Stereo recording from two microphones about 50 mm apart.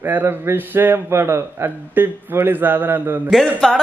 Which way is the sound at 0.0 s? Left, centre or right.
Right.